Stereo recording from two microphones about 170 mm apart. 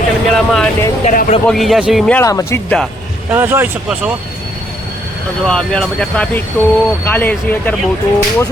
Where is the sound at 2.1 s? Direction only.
20° left (ahead or behind).